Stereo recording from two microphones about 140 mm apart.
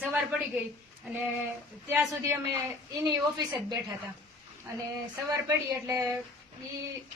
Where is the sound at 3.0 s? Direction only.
30° right (ahead or behind).